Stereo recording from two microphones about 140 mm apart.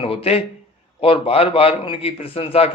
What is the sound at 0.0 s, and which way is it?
A man's voice, 45° left (ahead or behind).